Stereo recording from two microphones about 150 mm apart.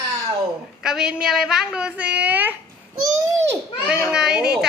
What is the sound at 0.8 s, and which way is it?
A woman's voice, 5° right (ahead or behind).